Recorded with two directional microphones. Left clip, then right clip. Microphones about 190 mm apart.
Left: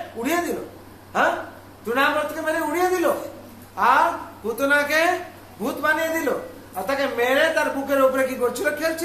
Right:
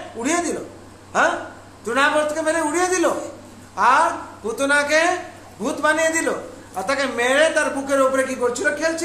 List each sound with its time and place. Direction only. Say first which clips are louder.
0.2 s a man's voice: right 2 dB; 15° right (ahead or behind)